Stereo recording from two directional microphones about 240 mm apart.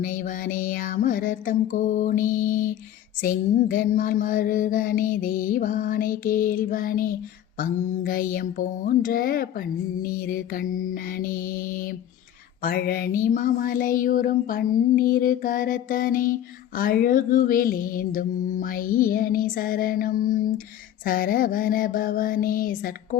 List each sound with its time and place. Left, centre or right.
0.0 s child singing: left